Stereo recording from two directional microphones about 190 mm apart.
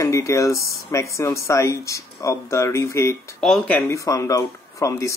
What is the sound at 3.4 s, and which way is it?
Speech, centre (ahead or behind).